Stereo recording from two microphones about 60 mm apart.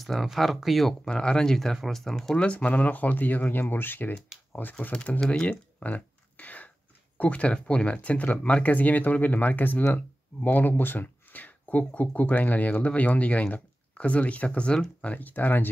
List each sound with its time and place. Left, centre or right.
0.0 s speech: centre
1.0 s speech: centre
2.4 s speech: left
4.9 s speech: centre
5.3 s a sound: centre
7.2 s speech: left
15.1 s speech: left